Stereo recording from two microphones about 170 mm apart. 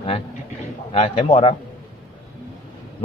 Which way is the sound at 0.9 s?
35° left (ahead or behind).